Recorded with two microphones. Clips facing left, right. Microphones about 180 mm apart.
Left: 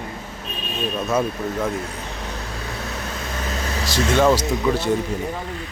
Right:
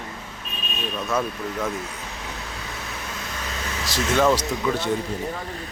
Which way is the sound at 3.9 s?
Centre (ahead or behind).